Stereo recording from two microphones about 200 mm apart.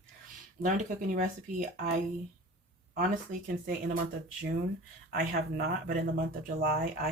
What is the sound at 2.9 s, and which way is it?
Speech, 40° right (ahead or behind).